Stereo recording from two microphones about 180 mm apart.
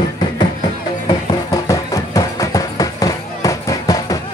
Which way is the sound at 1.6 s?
20° left (ahead or behind).